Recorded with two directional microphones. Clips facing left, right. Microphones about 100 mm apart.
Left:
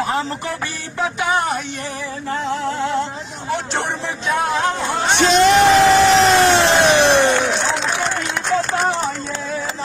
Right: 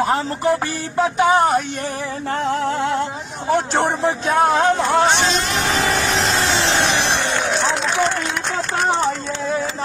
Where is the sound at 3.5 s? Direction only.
45° right (ahead or behind).